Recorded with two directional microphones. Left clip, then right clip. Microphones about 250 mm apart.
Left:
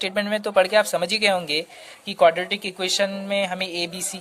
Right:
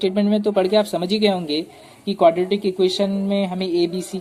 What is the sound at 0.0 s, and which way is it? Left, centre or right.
Speech, left.